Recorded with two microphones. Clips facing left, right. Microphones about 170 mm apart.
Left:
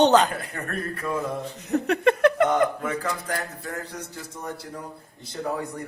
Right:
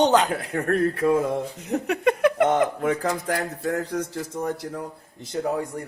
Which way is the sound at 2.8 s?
65° right (ahead or behind).